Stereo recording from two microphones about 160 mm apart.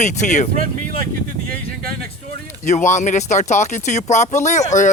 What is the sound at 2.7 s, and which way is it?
A man's voice, 50° left (ahead or behind).